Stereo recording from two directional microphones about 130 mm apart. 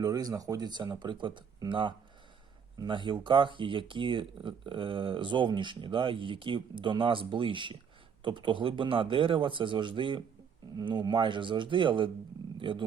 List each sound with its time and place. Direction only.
0.0 s speech: 30° right (ahead or behind)
12.5 s roaring cats: 40° right (ahead or behind)